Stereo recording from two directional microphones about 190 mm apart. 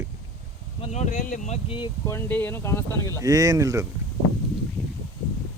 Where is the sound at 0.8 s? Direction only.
35° left (ahead or behind).